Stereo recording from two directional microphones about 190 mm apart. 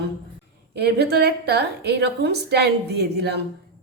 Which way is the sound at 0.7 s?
60° right (ahead or behind).